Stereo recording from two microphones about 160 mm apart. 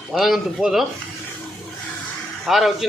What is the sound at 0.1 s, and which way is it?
Speech, centre (ahead or behind).